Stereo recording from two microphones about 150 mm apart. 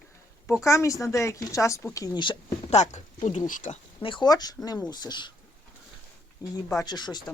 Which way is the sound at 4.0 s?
35° left (ahead or behind).